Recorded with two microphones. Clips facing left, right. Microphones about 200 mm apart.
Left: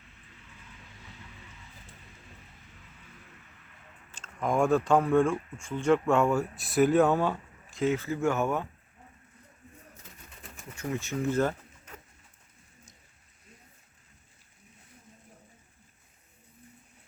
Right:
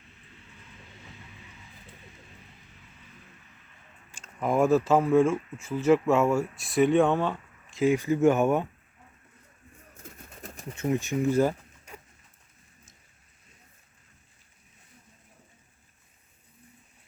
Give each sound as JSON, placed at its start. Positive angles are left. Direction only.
{"t": 4.1, "sound": "speech", "side_deg": -10}
{"t": 7.8, "sound": "speech", "side_deg": -15}
{"t": 10.0, "sound": "pigeon", "side_deg": -45}
{"t": 10.8, "sound": "speech", "side_deg": -20}